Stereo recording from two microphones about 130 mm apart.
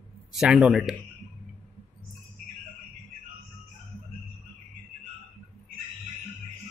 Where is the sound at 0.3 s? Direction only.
5° right (ahead or behind).